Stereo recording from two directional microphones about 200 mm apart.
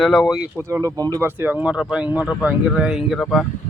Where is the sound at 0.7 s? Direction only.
15° right (ahead or behind); by 3.5 s centre (ahead or behind).